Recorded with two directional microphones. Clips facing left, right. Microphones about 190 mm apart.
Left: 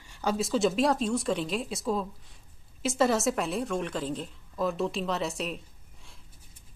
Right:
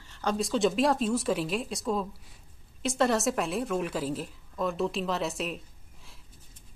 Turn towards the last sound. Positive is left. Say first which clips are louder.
# even
turn(degrees=0)  # may be behind; listen again after turning